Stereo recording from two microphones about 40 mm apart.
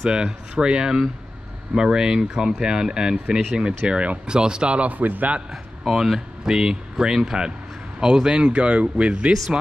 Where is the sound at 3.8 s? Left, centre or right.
Right.